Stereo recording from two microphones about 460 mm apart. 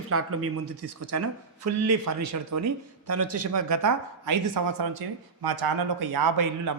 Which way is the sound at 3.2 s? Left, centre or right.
Right.